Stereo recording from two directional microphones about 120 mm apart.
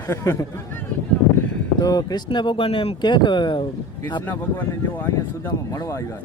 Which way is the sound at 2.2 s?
45° left (ahead or behind).